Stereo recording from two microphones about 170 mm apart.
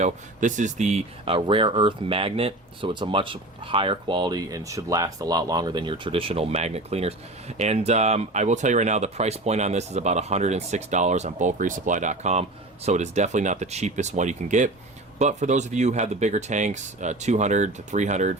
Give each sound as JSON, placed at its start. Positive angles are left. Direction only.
{"t": 0.0, "sound": "speech", "side_deg": -50}